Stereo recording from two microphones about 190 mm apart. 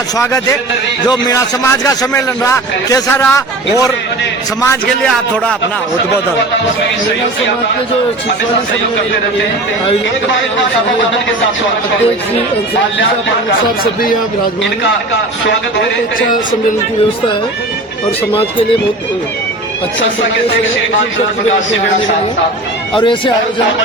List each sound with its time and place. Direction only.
0.2 s a man's voice: 15° left (ahead or behind)
4.9 s a man's voice: 5° left (ahead or behind)
23.0 s speech: 25° left (ahead or behind)